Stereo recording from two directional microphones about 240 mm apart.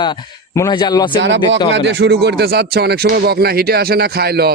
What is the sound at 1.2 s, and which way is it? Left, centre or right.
Speech, right.